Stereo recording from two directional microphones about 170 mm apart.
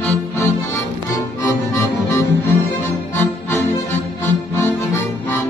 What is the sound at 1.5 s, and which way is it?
Music, 20° left (ahead or behind).